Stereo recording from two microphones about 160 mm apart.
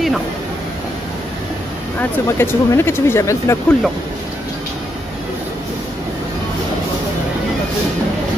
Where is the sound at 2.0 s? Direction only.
15° left (ahead or behind).